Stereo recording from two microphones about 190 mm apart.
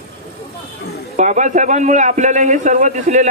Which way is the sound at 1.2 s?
40° right (ahead or behind).